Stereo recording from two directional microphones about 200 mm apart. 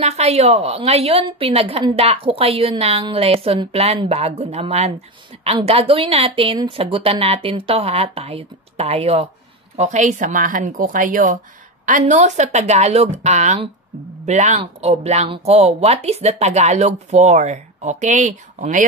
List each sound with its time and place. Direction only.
0.0 s a woman's voice: 30° right (ahead or behind)